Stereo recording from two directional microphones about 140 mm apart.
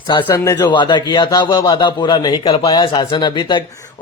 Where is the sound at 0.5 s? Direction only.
30° left (ahead or behind).